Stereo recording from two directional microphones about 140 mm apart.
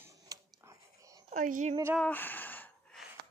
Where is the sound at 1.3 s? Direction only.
65° right (ahead or behind).